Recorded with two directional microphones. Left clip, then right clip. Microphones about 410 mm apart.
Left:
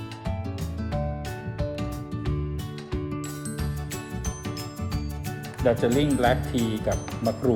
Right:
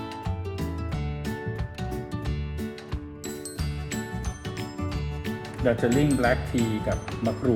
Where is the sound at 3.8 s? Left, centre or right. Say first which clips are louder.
Right 1 dB; centre.